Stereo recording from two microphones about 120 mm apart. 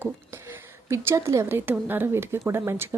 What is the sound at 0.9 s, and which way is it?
Speech, 25° right (ahead or behind).